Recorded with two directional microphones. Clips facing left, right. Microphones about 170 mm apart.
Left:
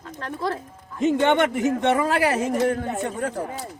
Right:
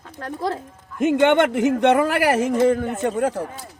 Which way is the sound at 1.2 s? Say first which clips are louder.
Right 5 dB; 90° right.